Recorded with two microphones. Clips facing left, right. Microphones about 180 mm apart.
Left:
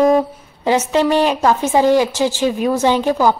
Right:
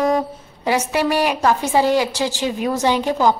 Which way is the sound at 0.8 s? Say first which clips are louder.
Left 4 dB; 10° right (ahead or behind).